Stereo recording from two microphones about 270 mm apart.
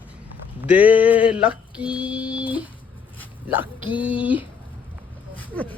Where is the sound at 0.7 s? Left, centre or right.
Centre.